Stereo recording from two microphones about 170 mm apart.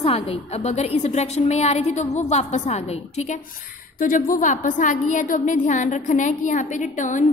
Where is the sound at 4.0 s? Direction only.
55° left (ahead or behind).